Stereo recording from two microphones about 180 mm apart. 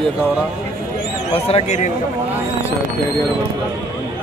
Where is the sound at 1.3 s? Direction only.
35° left (ahead or behind).